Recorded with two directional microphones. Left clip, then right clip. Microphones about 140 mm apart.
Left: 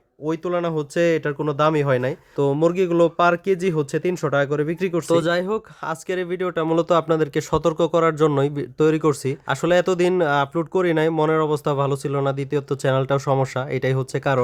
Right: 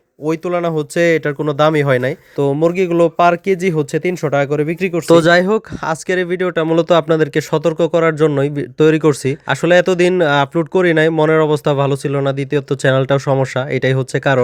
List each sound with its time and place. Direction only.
0.3 s speech: 40° right (ahead or behind)
5.0 s speech: 50° right (ahead or behind); by 14.4 s 25° right (ahead or behind)